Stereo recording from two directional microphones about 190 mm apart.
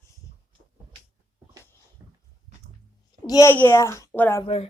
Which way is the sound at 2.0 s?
15° right (ahead or behind).